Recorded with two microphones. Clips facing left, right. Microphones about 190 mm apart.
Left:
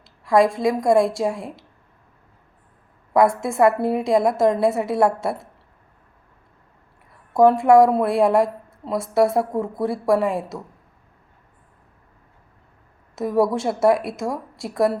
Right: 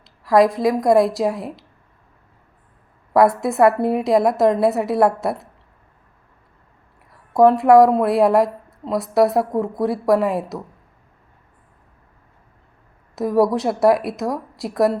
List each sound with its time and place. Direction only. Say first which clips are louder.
0.3 s speech: right 2 dB; centre (ahead or behind)
0.6 s a woman's voice: right 2 dB; 25° left (ahead or behind)
0.9 s speech: right 2 dB; centre (ahead or behind)
3.4 s speech: right 2 dB; centre (ahead or behind)
7.3 s speech: right 2 dB; centre (ahead or behind)
13.1 s speech: right 2 dB; centre (ahead or behind)